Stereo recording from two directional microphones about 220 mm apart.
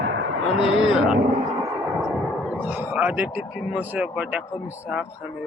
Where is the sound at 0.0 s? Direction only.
65° right (ahead or behind).